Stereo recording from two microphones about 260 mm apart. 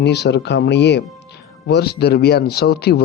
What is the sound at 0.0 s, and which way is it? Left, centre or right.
Speech, left.